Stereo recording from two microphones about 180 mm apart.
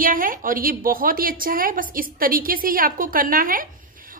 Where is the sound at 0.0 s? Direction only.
50° right (ahead or behind).